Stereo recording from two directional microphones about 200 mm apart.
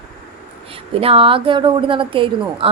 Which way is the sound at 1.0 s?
25° right (ahead or behind).